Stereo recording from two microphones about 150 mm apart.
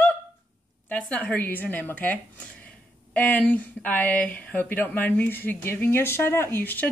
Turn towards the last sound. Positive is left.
turn(degrees=10)  # may be behind; listen again after turning